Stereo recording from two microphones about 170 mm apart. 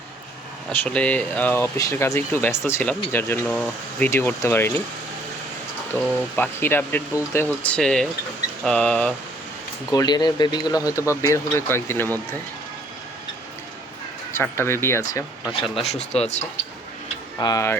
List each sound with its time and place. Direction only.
0.7 s speech: 10° left (ahead or behind)
5.9 s speech: 10° left (ahead or behind)
9.9 s speech: 25° left (ahead or behind)
14.3 s speech: 15° left (ahead or behind)
15.9 s speech: 40° left (ahead or behind)
17.4 s speech: 20° left (ahead or behind)